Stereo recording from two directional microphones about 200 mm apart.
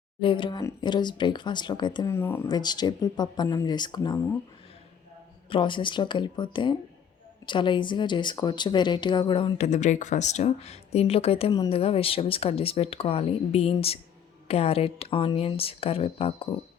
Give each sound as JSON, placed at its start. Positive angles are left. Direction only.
{"t": 0.2, "sound": "speech", "side_deg": 25}
{"t": 5.5, "sound": "speech", "side_deg": 25}